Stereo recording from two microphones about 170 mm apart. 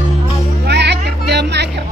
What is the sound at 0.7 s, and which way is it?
Music, 85° right.